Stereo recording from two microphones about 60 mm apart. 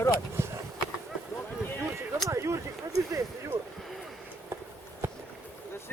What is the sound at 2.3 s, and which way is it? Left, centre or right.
Speech, right.